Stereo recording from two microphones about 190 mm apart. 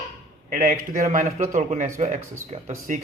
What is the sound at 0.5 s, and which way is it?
A man's voice, 50° right (ahead or behind).